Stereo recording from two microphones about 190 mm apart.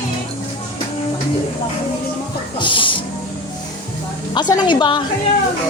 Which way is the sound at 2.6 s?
25° left (ahead or behind).